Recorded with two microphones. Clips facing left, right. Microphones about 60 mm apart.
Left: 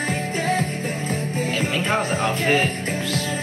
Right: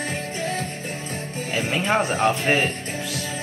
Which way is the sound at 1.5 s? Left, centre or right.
Centre.